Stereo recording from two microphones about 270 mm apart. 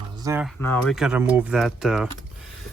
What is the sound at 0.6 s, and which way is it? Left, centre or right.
Speech, centre.